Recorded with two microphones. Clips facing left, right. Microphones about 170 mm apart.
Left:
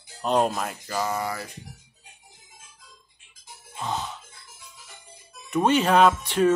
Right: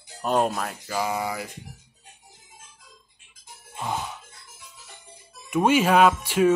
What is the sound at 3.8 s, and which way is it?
Speech, 15° right (ahead or behind).